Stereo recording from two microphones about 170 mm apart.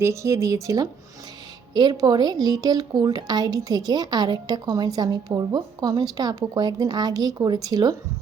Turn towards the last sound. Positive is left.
turn(degrees=-20)  # may be behind; listen again after turning